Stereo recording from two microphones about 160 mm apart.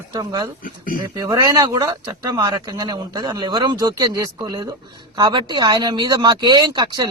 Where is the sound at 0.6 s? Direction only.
60° left (ahead or behind).